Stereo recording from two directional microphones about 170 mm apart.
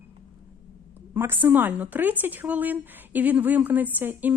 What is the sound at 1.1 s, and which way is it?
A woman's voice, 15° right (ahead or behind).